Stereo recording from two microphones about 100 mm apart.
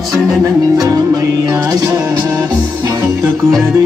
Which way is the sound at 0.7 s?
40° right (ahead or behind).